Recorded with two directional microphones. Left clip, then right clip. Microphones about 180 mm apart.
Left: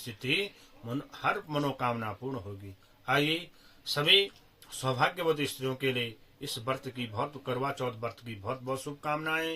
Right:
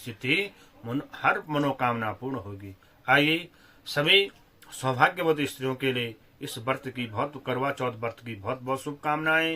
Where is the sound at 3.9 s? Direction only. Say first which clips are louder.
Right 3 dB; 5° right (ahead or behind).